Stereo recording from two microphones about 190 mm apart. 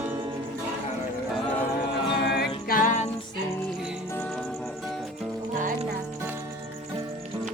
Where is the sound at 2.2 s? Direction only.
60° left (ahead or behind); by 3.0 s 40° left (ahead or behind).